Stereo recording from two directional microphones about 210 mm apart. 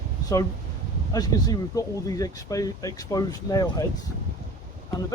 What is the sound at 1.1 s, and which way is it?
Speech, 15° left (ahead or behind).